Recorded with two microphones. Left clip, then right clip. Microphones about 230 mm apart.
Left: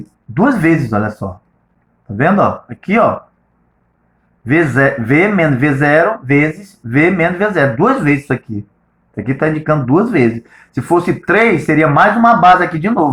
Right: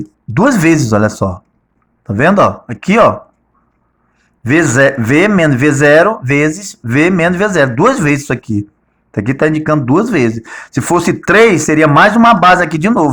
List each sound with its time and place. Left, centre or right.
0.3 s speech: right
4.4 s speech: right